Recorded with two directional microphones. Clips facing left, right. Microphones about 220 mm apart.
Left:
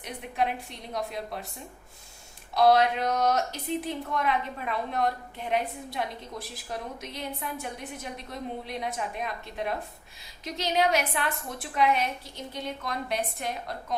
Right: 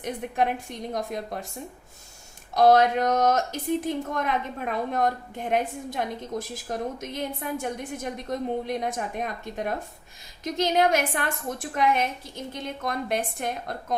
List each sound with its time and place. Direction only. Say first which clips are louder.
0.0 s a woman's voice: right 4 dB; 45° right (ahead or behind)
2.6 s a woman's voice: right 3 dB; 45° right (ahead or behind)